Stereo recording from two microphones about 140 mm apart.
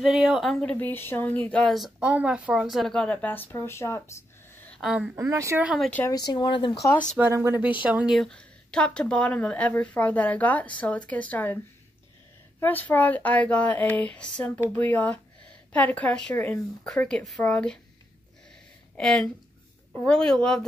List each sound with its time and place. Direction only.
0.0 s speech: 5° right (ahead or behind); by 4.0 s 20° left (ahead or behind)
4.6 s a sound: 5° left (ahead or behind)
5.1 s speech: 20° right (ahead or behind)
5.6 s speech: 5° right (ahead or behind)
6.0 s speech: 30° left (ahead or behind)
7.2 s speech: 20° right (ahead or behind); by 11.5 s 10° left (ahead or behind)
12.5 s speech: 15° left (ahead or behind)
18.9 s speech: 5° left (ahead or behind)